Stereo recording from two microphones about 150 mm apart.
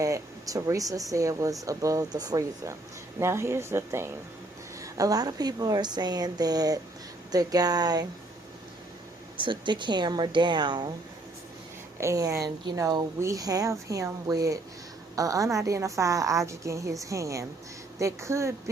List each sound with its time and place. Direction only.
0.0 s a woman's voice: 20° right (ahead or behind)
9.4 s speech: 30° right (ahead or behind)
11.9 s speech: 20° right (ahead or behind)